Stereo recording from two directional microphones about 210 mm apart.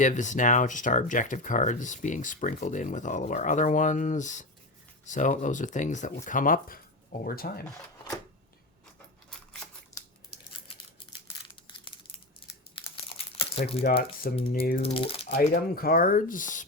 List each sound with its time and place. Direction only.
0.0 s speech: 35° left (ahead or behind)
9.9 s a sound: 15° left (ahead or behind)
11.9 s crumpling: 25° left (ahead or behind)
14.5 s speech: 45° left (ahead or behind)
14.8 s speech: 25° left (ahead or behind)
15.4 s speech: 45° left (ahead or behind)